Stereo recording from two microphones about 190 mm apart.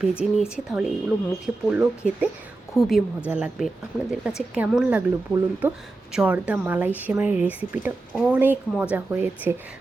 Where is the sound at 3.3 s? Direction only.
5° right (ahead or behind).